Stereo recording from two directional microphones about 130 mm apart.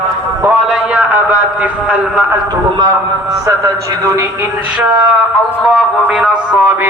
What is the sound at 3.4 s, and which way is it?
Speech, 25° right (ahead or behind).